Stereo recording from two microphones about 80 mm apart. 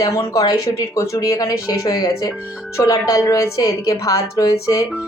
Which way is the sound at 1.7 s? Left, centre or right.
Left.